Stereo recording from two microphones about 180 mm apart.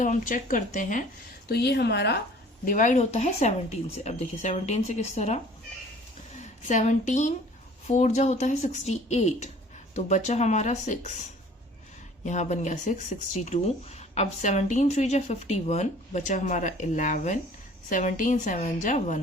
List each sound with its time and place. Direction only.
0.0 s speech: 45° left (ahead or behind)
1.5 s speech: 65° left (ahead or behind)
2.6 s speech: 45° left (ahead or behind)
6.4 s a woman's voice: 45° left (ahead or behind)
12.2 s speech: 40° left (ahead or behind)